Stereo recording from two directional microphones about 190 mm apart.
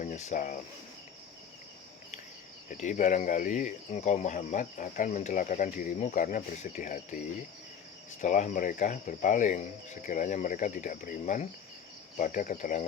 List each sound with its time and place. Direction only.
0.0 s speech: 40° left (ahead or behind)
2.6 s speech: 40° left (ahead or behind)
8.2 s cricket: 40° left (ahead or behind)